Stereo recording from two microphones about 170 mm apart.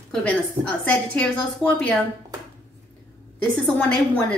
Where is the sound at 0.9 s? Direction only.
5° left (ahead or behind).